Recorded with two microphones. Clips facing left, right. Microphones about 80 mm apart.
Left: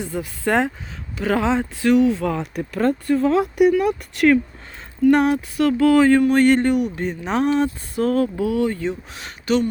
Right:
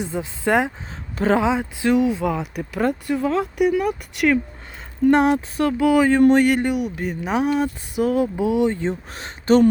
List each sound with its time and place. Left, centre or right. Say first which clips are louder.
0.0 s speech: even; right
2.3 s speech: left 1 dB; centre
3.2 s speech: left 3 dB; centre
3.7 s speech: left 3 dB; centre
5.1 s speech: even; right
8.9 s speech: right 1 dB; right